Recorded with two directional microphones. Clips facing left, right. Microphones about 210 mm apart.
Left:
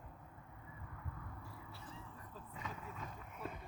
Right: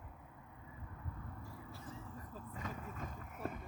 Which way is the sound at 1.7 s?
45° right (ahead or behind).